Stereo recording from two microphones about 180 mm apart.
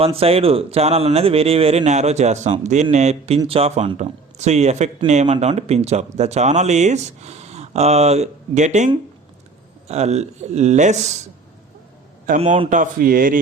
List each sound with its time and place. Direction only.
0.0 s speech: 35° right (ahead or behind)
9.9 s speech: 35° right (ahead or behind)
12.4 s speech: 40° right (ahead or behind)